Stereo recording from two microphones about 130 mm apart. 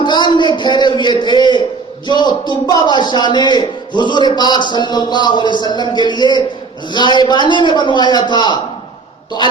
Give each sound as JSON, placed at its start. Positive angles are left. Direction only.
{"t": 0.0, "sound": "a man's voice", "side_deg": 35}